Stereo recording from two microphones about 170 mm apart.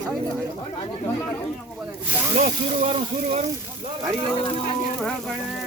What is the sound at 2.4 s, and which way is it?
Speech, 35° right (ahead or behind).